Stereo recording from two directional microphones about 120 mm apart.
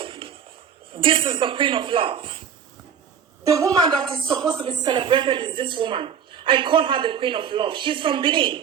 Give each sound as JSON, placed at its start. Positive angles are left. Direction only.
{"t": 0.0, "sound": "a sound", "side_deg": -45}
{"t": 0.9, "sound": "a woman's voice", "side_deg": -45}
{"t": 3.4, "sound": "a woman's voice", "side_deg": -30}
{"t": 4.3, "sound": "a woman's voice", "side_deg": -40}